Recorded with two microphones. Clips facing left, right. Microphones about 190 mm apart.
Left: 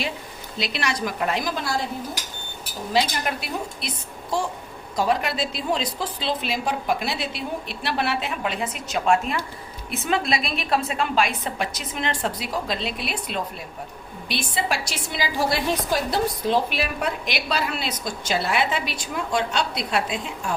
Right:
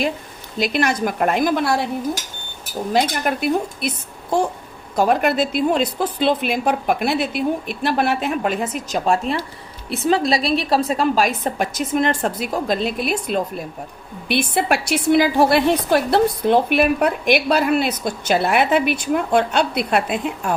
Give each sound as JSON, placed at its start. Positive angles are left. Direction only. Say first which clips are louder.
{"t": 0.6, "sound": "a woman's voice", "louder": "right 7 dB", "side_deg": -50}
{"t": 2.9, "sound": "a woman's voice", "louder": "right 4 dB", "side_deg": -50}
{"t": 4.9, "sound": "a woman's voice", "louder": "right 6 dB", "side_deg": -55}
{"t": 14.3, "sound": "a woman's voice", "louder": "right 8 dB", "side_deg": -60}